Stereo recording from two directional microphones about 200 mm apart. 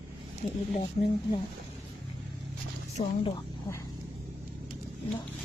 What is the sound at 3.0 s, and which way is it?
Speech, 30° left (ahead or behind).